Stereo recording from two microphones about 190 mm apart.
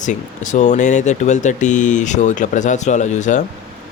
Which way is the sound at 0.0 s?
40° left (ahead or behind).